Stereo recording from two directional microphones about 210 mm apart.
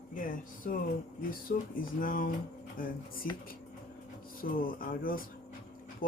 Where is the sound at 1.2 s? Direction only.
45° left (ahead or behind).